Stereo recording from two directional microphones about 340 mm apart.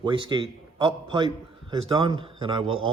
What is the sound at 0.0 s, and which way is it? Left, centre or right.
A man's voice, centre.